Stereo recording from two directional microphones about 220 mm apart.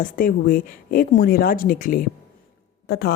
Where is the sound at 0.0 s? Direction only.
40° left (ahead or behind).